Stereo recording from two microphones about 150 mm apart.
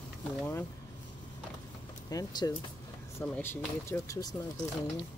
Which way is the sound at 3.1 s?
15° left (ahead or behind).